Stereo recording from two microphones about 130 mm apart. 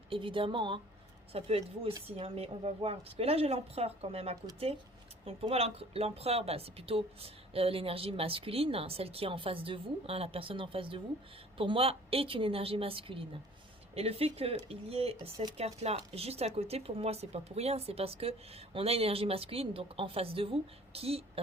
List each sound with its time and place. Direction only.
0.1 s speech: 40° right (ahead or behind)